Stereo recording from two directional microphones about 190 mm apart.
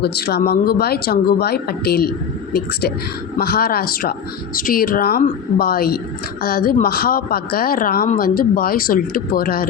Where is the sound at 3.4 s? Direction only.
55° left (ahead or behind).